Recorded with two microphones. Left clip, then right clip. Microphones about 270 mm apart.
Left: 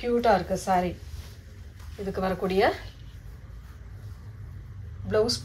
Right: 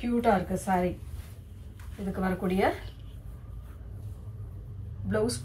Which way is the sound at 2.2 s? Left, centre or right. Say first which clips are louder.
Left 4 dB; left.